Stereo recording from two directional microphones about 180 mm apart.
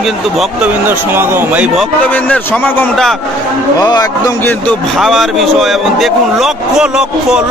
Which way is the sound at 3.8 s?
20° left (ahead or behind).